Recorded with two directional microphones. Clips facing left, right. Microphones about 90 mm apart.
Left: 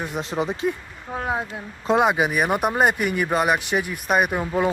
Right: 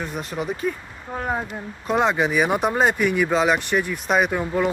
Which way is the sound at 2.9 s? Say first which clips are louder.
Right 3 dB; 60° left (ahead or behind).